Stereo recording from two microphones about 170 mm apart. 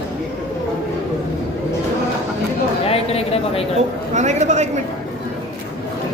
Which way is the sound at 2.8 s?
35° left (ahead or behind).